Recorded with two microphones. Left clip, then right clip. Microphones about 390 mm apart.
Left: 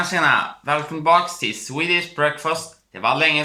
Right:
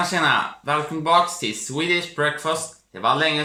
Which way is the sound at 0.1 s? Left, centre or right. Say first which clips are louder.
Left 2 dB; centre.